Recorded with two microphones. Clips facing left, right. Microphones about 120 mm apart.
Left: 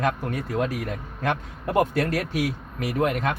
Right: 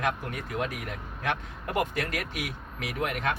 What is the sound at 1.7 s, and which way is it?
A man's voice, 40° left (ahead or behind).